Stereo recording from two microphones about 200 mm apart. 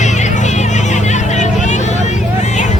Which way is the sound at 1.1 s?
35° left (ahead or behind).